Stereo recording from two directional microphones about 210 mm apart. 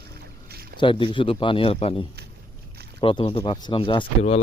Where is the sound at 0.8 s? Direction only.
25° left (ahead or behind).